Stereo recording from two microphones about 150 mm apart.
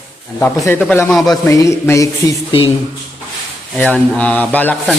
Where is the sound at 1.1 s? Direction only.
Centre (ahead or behind).